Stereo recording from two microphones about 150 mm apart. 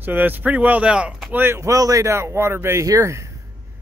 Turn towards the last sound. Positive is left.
turn(degrees=-20)  # may be behind; listen again after turning